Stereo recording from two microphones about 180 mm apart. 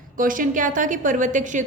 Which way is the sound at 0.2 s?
50° right (ahead or behind).